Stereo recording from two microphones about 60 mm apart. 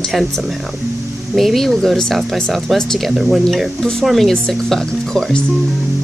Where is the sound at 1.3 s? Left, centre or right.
Centre.